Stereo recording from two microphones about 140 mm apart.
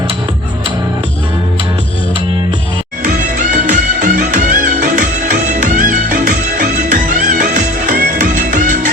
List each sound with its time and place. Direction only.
3.1 s music: 65° right (ahead or behind)